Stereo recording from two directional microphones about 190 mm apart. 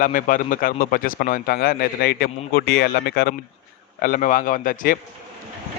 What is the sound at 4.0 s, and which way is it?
Speech, 45° left (ahead or behind).